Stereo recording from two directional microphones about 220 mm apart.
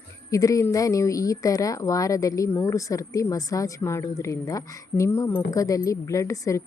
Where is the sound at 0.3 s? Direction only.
15° left (ahead or behind).